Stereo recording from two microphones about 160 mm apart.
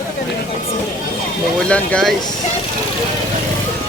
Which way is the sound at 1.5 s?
5° left (ahead or behind).